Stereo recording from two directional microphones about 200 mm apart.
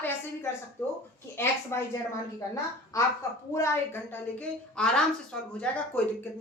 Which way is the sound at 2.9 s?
15° left (ahead or behind).